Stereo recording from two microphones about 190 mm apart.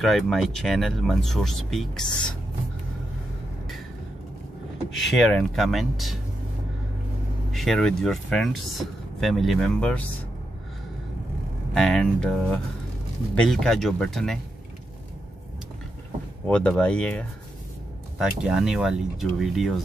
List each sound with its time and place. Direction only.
0.0 s speech: centre (ahead or behind)
4.9 s speech: centre (ahead or behind)
7.5 s speech: centre (ahead or behind)
11.7 s speech: centre (ahead or behind)
16.4 s speech: 5° left (ahead or behind)